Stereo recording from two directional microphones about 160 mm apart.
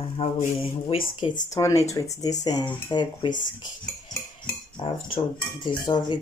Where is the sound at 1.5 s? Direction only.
20° left (ahead or behind).